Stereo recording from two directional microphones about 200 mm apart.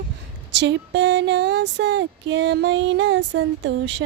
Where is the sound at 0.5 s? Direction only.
60° right (ahead or behind).